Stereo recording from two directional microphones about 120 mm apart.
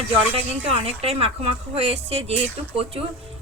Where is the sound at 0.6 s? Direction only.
55° right (ahead or behind).